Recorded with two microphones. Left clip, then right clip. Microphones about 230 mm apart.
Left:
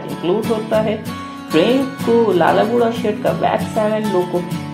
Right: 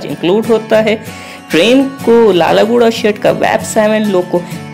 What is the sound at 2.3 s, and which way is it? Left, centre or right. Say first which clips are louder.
Speech: right 5 dB; right.